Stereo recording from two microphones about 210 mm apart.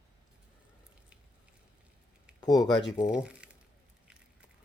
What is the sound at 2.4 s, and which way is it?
Speech, 20° left (ahead or behind).